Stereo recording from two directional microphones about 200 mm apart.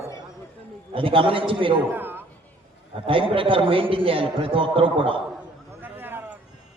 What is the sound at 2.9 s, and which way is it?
A man's voice, 25° right (ahead or behind).